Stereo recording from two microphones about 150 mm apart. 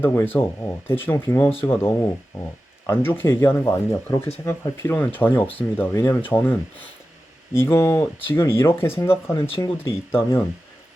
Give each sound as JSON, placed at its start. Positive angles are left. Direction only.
{"t": 0.0, "sound": "speech", "side_deg": 15}